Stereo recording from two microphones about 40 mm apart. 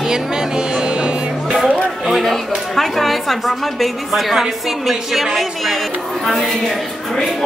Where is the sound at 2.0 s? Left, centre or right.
Centre.